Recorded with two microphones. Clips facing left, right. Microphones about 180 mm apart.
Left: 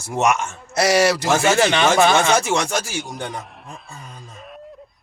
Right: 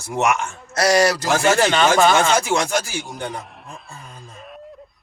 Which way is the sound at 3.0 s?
Centre (ahead or behind).